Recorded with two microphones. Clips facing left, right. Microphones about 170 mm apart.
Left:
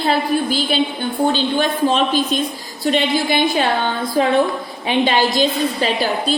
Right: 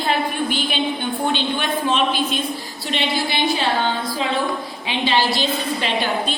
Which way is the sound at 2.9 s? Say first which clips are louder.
Left 6 dB; 45° left (ahead or behind).